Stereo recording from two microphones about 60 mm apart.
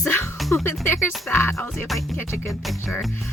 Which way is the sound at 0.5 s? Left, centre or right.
Left.